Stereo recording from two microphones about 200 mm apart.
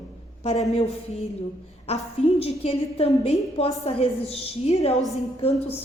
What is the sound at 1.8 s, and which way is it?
A woman's voice, 30° left (ahead or behind).